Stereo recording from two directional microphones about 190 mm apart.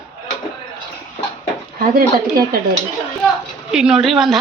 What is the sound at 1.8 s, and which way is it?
Speech, 50° right (ahead or behind).